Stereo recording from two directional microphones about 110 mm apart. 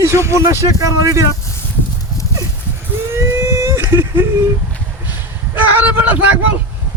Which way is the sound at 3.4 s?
25° right (ahead or behind).